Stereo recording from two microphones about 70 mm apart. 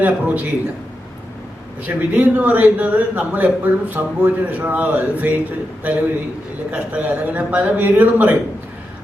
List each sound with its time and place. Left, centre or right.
0.0 s a man's voice: right
1.9 s a man's voice: right